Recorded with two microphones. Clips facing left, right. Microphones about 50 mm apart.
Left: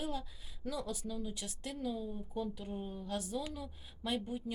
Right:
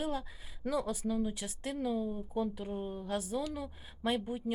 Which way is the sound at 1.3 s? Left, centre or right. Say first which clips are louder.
Right 5 dB; centre.